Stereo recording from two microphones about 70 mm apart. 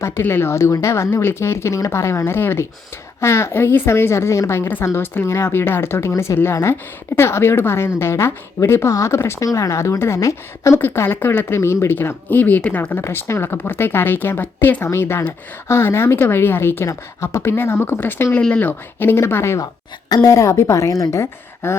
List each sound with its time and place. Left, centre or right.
0.0 s a woman's voice: left
0.5 s a woman's voice: left
10.8 s a woman's voice: left
11.9 s speech: left
13.0 s a woman's voice: left
18.3 s speech: centre
18.9 s a woman's voice: left
20.1 s a woman's voice: left
20.3 s a woman's voice: left